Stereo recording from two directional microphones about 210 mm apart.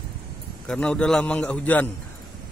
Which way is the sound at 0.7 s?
5° left (ahead or behind).